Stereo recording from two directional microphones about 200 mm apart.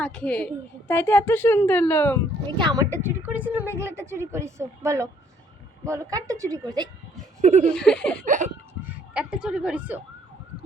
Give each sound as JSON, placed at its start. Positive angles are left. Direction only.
{"t": 0.0, "sound": "a woman's voice", "side_deg": 5}
{"t": 2.5, "sound": "a woman's voice", "side_deg": -25}
{"t": 7.4, "sound": "laughter", "side_deg": -35}
{"t": 7.7, "sound": "laughter", "side_deg": 5}
{"t": 8.2, "sound": "laughter", "side_deg": -40}
{"t": 8.8, "sound": "speech", "side_deg": -5}